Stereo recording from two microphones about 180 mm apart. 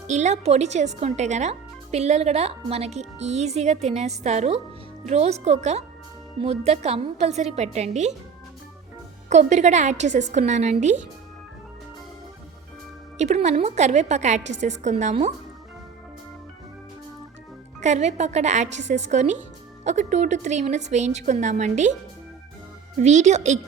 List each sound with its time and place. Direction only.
0.1 s speech: 40° right (ahead or behind)
9.3 s speech: 40° right (ahead or behind)
13.1 s speech: 40° right (ahead or behind)
17.7 s speech: 40° right (ahead or behind)
23.0 s speech: 40° right (ahead or behind)